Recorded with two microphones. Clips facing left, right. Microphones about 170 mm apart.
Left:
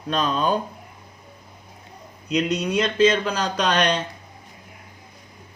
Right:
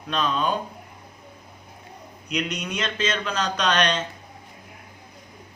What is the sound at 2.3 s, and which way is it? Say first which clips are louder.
Speech: left 7 dB; 30° left (ahead or behind).